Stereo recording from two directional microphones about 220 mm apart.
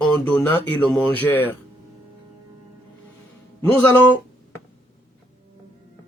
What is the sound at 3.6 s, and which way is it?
Speech, 10° left (ahead or behind).